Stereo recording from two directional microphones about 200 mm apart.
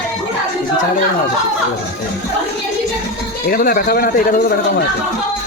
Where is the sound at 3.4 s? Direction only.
45° left (ahead or behind).